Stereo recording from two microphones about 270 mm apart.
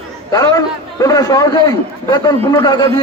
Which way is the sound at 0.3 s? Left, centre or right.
Centre.